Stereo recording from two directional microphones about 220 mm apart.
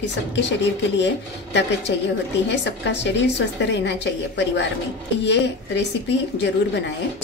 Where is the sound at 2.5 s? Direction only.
55° left (ahead or behind).